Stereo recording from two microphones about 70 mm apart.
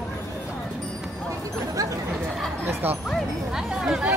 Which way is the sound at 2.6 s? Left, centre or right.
Right.